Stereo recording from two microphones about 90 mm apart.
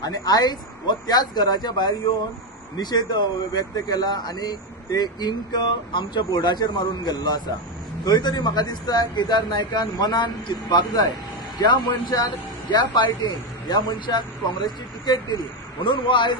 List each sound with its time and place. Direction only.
0.0 s speech: 45° left (ahead or behind)
15.8 s speech: 65° left (ahead or behind)